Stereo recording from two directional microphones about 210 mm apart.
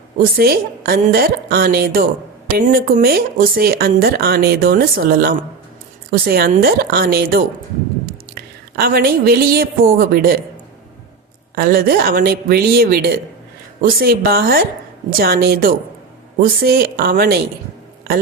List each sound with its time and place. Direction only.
0.2 s a woman's voice: 45° right (ahead or behind)
11.5 s speech: 45° right (ahead or behind)